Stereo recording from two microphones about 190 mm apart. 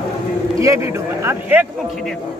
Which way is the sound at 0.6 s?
15° right (ahead or behind).